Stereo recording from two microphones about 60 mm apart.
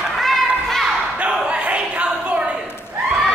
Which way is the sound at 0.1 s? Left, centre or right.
Centre.